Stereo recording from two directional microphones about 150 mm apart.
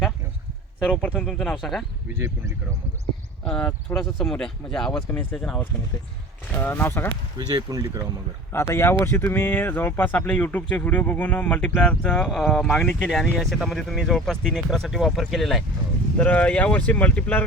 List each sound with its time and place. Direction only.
0.9 s speech: 10° left (ahead or behind)
2.1 s speech: 20° right (ahead or behind)
3.4 s speech: 5° left (ahead or behind)
7.3 s speech: 25° right (ahead or behind)
8.5 s speech: 15° left (ahead or behind)